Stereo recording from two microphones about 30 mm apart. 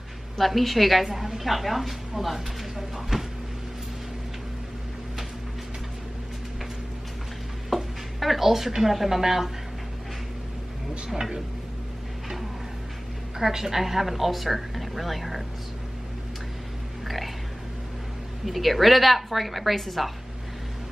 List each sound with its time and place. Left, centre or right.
0.4 s a woman's voice: centre
3.1 s vehicle: centre
7.7 s a sound: centre
8.8 s a woman's voice: centre
11.1 s speech: centre
13.4 s a woman's voice: centre
18.4 s a woman's voice: centre